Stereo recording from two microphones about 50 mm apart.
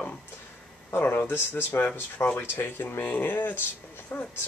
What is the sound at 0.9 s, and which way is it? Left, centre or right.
Speech, left.